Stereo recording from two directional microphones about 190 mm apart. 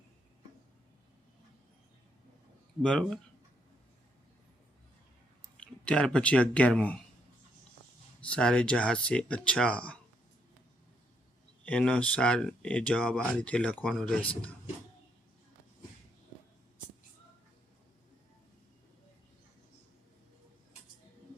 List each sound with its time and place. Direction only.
2.8 s speech: 5° left (ahead or behind)
5.5 s speech: 5° left (ahead or behind)
8.2 s speech: 5° left (ahead or behind)
11.6 s speech: 5° left (ahead or behind)